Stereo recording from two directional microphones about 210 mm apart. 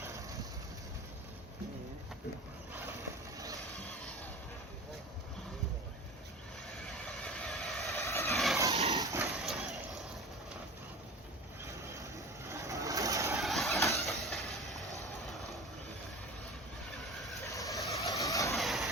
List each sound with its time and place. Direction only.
0.0 s vehicle: 15° right (ahead or behind)
3.0 s vehicle: 15° right (ahead or behind)
6.8 s vehicle: centre (ahead or behind)
7.9 s vehicle: 15° left (ahead or behind)
8.7 s a sound: 30° right (ahead or behind)
9.0 s a sound: 15° right (ahead or behind)
9.2 s a sound: centre (ahead or behind)
11.6 s vehicle: 15° right (ahead or behind)
13.3 s vehicle: centre (ahead or behind)
13.7 s vehicle: 15° left (ahead or behind)
14.0 s vehicle: centre (ahead or behind)
17.4 s vehicle: 15° left (ahead or behind)
18.5 s vehicle: centre (ahead or behind)